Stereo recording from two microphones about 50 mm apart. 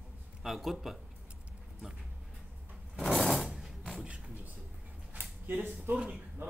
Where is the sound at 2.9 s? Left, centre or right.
Centre.